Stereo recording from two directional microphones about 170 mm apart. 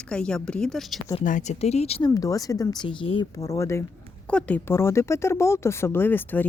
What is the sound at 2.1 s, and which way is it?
Speech, 20° left (ahead or behind).